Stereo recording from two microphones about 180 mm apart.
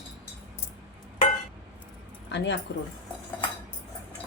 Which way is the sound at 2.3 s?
80° left.